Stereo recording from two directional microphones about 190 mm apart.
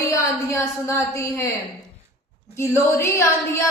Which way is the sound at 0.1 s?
15° left (ahead or behind).